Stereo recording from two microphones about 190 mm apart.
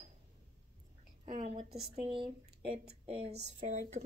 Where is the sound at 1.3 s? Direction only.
30° right (ahead or behind).